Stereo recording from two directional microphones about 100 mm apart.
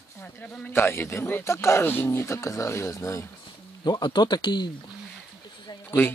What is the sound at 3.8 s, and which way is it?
Speech, 45° left (ahead or behind).